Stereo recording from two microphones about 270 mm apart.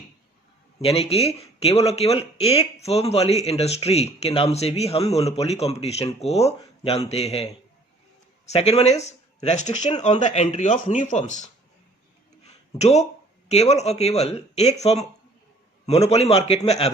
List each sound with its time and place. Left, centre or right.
0.8 s speech: left
8.4 s speech: left
12.4 s a sound: left
13.5 s speech: left